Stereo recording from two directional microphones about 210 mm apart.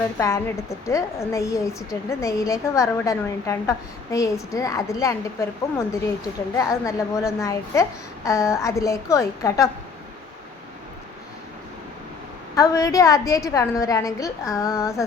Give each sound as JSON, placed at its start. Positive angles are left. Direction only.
{"t": 0.2, "sound": "a woman's voice", "side_deg": 15}
{"t": 6.6, "sound": "a woman's voice", "side_deg": 15}
{"t": 12.5, "sound": "a woman's voice", "side_deg": 15}